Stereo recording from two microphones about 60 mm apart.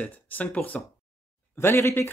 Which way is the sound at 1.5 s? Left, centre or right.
Left.